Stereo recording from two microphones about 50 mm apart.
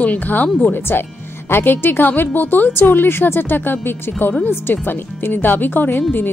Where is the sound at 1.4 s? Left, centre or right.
Left.